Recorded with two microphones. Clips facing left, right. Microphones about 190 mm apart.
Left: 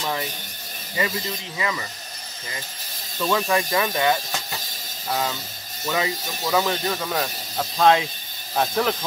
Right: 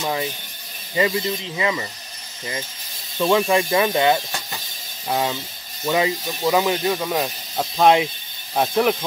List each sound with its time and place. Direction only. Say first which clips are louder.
0.0 s speech: right 3 dB; 20° right (ahead or behind)
3.3 s speech: right 4 dB; 15° right (ahead or behind)